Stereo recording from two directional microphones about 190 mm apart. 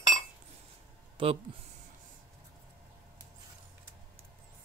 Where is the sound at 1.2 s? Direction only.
25° right (ahead or behind).